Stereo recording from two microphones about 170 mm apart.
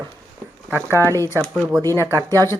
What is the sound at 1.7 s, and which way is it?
Speech, 20° right (ahead or behind).